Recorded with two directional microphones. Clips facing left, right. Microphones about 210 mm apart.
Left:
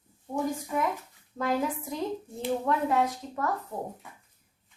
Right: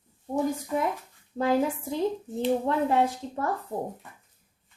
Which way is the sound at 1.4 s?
30° right (ahead or behind).